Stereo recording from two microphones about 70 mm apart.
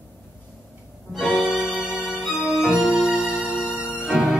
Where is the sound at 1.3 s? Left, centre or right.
Centre.